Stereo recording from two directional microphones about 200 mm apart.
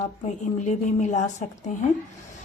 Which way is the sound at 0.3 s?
35° left (ahead or behind).